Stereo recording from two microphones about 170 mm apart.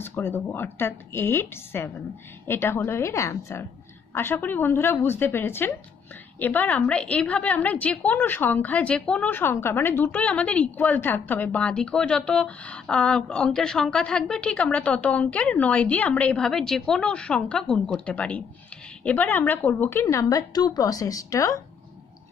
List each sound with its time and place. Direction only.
0.0 s a woman's voice: 15° left (ahead or behind)